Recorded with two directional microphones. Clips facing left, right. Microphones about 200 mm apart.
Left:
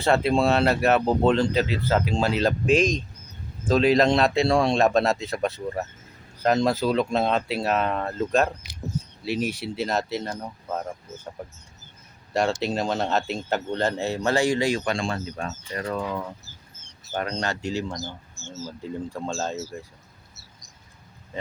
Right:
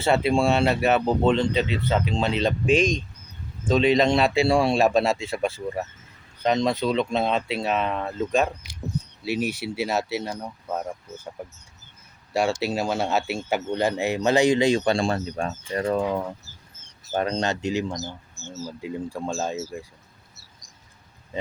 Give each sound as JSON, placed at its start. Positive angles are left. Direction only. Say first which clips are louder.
{"t": 0.0, "sound": "speech", "louder": "even", "side_deg": 0}
{"t": 12.3, "sound": "speech", "louder": "even", "side_deg": -5}
{"t": 14.8, "sound": "speech", "louder": "right 4 dB", "side_deg": -35}
{"t": 15.7, "sound": "speech", "louder": "right 5 dB", "side_deg": -25}